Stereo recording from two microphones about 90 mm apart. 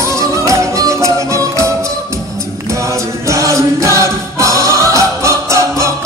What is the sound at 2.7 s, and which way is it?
Music, 35° right (ahead or behind).